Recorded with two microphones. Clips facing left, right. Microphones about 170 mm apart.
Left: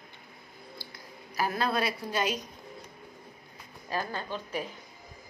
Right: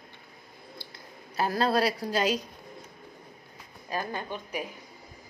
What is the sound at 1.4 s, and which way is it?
A woman's voice, 30° right (ahead or behind).